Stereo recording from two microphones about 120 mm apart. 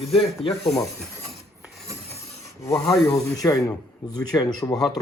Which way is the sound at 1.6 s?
Centre (ahead or behind).